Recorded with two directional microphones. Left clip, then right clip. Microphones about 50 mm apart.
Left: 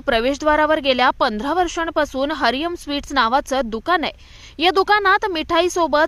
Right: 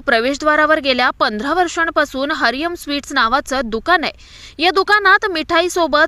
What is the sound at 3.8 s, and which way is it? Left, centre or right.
Speech, right.